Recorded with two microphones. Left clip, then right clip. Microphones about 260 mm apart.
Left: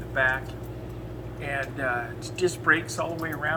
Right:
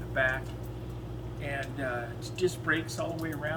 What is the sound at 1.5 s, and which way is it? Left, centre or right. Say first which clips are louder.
Speech: left 6 dB; centre.